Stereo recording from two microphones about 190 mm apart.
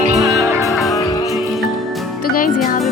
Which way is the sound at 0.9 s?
15° left (ahead or behind).